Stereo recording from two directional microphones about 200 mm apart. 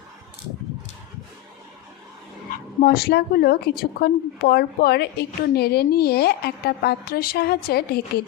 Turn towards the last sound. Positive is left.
turn(degrees=50)  # may be behind; listen again after turning